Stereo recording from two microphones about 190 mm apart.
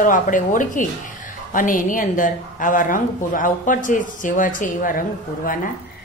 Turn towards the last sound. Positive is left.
turn(degrees=45)  # may be behind; listen again after turning